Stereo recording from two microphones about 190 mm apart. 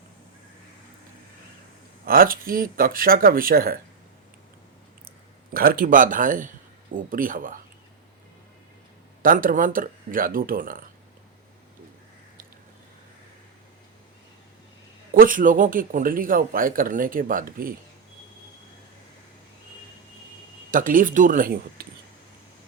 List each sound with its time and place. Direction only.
2.0 s a man's voice: 50° right (ahead or behind)
5.5 s a man's voice: 50° right (ahead or behind)
9.2 s a man's voice: 45° right (ahead or behind)
15.1 s a man's voice: 45° right (ahead or behind)
20.7 s a man's voice: 45° right (ahead or behind)